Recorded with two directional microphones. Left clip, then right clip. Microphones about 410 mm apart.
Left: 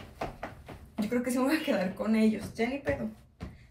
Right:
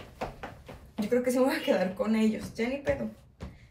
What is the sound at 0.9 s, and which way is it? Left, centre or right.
Speech, centre.